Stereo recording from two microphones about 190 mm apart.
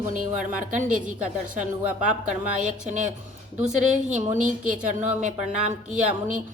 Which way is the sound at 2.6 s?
40° right (ahead or behind).